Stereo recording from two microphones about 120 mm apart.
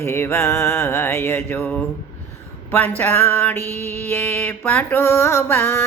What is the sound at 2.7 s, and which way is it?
Mantra, 15° left (ahead or behind).